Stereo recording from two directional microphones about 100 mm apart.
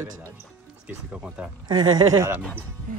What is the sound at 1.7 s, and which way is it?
Speech, 40° right (ahead or behind).